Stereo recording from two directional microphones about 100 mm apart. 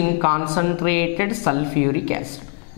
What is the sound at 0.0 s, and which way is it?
Speech, 10° left (ahead or behind).